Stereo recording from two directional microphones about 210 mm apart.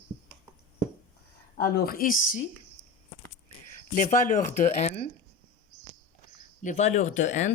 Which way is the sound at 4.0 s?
40° left (ahead or behind).